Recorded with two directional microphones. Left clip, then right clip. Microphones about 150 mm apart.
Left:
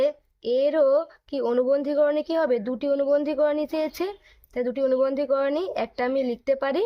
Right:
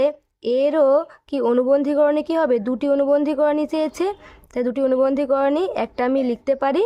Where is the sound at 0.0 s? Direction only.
45° right (ahead or behind).